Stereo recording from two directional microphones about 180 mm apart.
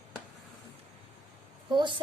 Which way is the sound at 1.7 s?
25° right (ahead or behind).